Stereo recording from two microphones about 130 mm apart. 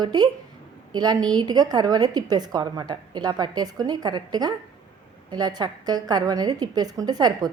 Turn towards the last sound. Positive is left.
turn(degrees=-30)  # may be behind; listen again after turning